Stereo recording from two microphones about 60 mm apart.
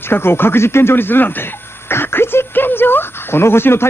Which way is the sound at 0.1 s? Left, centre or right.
Left.